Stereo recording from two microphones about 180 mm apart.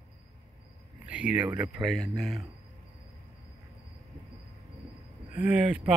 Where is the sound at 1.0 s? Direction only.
5° right (ahead or behind).